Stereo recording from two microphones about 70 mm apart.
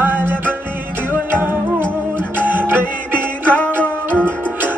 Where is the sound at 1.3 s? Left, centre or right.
Right.